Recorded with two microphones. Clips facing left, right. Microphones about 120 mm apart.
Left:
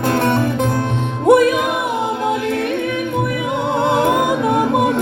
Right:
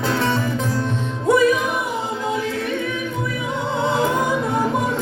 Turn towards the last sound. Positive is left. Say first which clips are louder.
# left 5 dB
turn(degrees=65)  # may be behind; listen again after turning